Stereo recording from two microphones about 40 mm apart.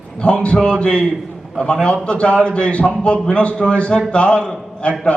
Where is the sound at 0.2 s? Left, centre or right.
Left.